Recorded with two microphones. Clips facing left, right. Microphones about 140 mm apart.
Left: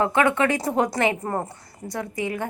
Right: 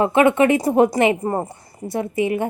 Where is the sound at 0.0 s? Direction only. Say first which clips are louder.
Right 5 dB; 20° right (ahead or behind).